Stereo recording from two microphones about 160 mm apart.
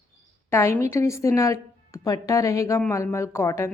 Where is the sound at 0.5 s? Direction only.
15° left (ahead or behind).